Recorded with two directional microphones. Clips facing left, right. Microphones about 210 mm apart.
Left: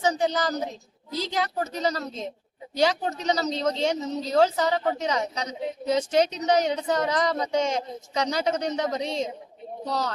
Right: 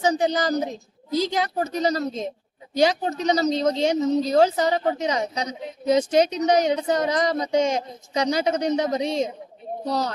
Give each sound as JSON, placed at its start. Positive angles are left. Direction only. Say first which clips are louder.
{"t": 0.0, "sound": "a woman's voice", "louder": "right 3 dB", "side_deg": -15}